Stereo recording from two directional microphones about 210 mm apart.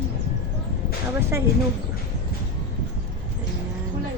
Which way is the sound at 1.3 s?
15° right (ahead or behind).